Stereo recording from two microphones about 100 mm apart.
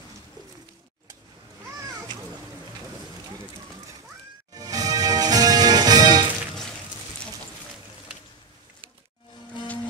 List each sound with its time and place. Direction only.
4.6 s television: 40° right (ahead or behind)